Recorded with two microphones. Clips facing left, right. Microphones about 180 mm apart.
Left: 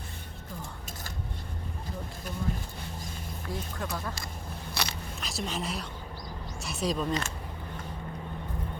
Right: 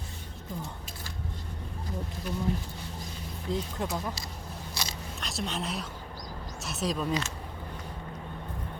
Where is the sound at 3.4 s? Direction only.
20° right (ahead or behind).